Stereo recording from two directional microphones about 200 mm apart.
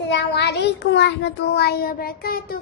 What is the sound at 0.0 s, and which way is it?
Child singing, 60° left (ahead or behind).